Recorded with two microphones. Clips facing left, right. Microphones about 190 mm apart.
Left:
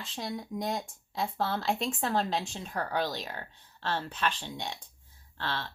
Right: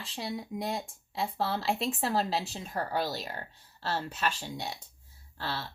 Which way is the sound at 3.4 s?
40° right (ahead or behind).